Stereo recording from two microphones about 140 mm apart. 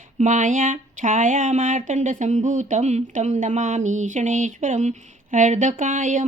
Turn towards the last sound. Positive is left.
turn(degrees=-65)  # may be behind; listen again after turning